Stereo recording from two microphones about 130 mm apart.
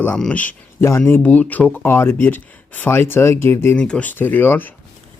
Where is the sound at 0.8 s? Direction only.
20° left (ahead or behind).